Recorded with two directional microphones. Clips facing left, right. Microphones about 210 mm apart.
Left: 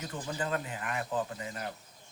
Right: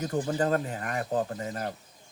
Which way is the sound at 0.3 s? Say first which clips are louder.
Right 4 dB; 45° right (ahead or behind).